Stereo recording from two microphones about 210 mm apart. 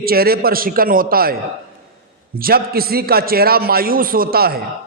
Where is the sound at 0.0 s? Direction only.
45° right (ahead or behind).